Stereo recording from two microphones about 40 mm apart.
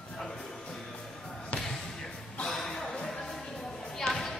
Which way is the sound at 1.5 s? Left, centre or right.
Left.